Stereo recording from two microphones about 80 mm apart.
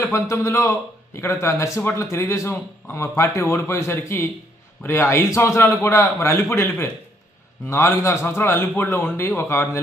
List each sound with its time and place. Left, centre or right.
0.1 s speech: left